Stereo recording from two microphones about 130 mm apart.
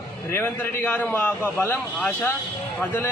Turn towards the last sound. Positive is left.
turn(degrees=15)  # may be behind; listen again after turning